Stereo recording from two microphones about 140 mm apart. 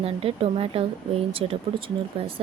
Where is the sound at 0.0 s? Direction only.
45° right (ahead or behind).